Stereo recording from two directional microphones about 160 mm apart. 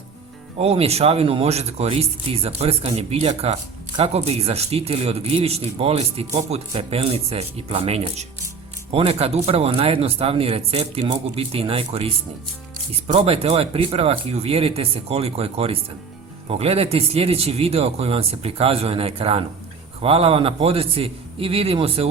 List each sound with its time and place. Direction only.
0.6 s speech: 40° right (ahead or behind)